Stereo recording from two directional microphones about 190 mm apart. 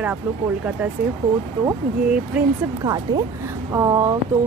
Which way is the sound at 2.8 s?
20° right (ahead or behind).